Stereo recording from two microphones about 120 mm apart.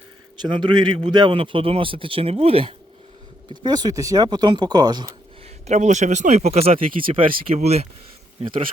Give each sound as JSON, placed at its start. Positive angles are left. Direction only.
{"t": 0.4, "sound": "a man's voice", "side_deg": -40}
{"t": 3.5, "sound": "speech", "side_deg": -35}
{"t": 5.6, "sound": "speech", "side_deg": -75}